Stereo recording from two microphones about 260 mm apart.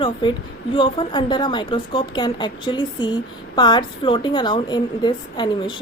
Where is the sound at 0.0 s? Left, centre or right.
Centre.